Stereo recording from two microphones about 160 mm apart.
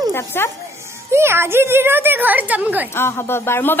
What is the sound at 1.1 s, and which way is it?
A woman's voice, 15° right (ahead or behind).